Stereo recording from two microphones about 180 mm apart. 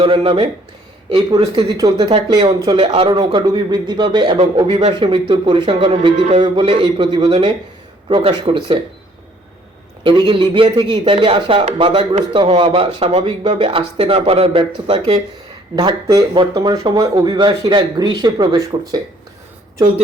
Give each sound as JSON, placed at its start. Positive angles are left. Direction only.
{"t": 0.0, "sound": "speech", "side_deg": -30}
{"t": 10.0, "sound": "speech", "side_deg": -25}